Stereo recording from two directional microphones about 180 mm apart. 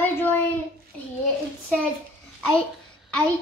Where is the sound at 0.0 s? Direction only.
10° left (ahead or behind).